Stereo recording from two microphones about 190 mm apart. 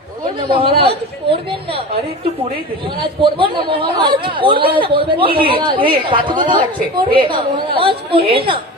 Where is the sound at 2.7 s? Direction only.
25° right (ahead or behind).